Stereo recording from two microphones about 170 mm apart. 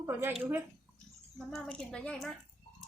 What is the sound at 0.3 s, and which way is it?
Speech, 5° right (ahead or behind).